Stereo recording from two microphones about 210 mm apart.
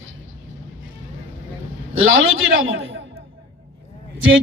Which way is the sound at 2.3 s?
65° right (ahead or behind).